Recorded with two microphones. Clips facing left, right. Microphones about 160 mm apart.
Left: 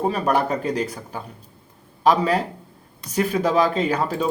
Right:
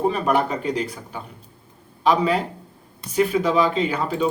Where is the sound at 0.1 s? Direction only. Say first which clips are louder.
Even; 40° left (ahead or behind).